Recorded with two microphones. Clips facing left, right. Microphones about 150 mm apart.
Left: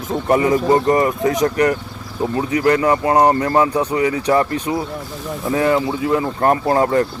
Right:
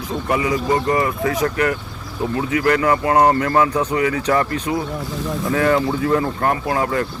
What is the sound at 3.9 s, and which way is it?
Speech, 30° left (ahead or behind).